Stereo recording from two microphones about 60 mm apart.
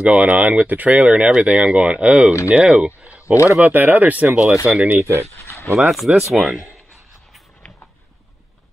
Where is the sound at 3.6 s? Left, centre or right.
Right.